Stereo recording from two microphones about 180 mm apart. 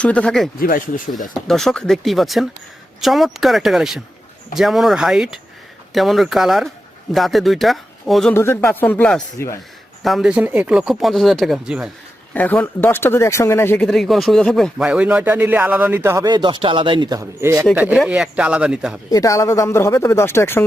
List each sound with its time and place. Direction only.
0.0 s speech: 5° left (ahead or behind)
0.6 s speech: 50° left (ahead or behind)
1.3 s speech: centre (ahead or behind)
8.3 s speech: 15° left (ahead or behind); by 11.9 s 5° right (ahead or behind)
12.3 s speech: 10° left (ahead or behind)
13.8 s speech: centre (ahead or behind)
19.1 s speech: 20° left (ahead or behind)